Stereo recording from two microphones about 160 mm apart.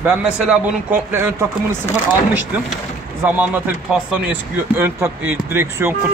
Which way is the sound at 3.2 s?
10° right (ahead or behind).